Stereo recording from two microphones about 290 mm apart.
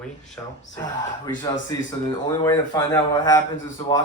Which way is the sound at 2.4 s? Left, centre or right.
Centre.